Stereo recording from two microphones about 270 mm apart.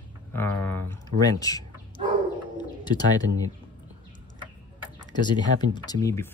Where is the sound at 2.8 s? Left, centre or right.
Centre.